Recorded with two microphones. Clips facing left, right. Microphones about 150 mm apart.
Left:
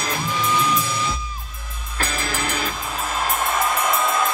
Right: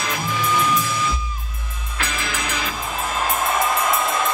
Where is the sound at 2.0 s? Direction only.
35° left (ahead or behind).